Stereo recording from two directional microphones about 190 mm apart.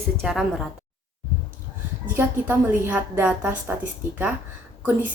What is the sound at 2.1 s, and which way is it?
A woman's voice, 10° right (ahead or behind).